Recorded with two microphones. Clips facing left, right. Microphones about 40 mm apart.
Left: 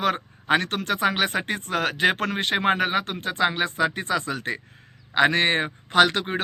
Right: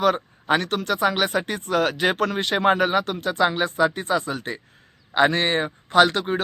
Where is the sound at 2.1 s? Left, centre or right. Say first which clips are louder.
Right 2 dB; left.